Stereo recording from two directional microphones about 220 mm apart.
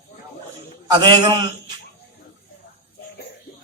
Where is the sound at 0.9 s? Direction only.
20° right (ahead or behind).